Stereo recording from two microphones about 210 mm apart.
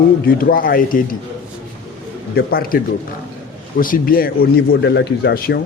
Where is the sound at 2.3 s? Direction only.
45° left (ahead or behind).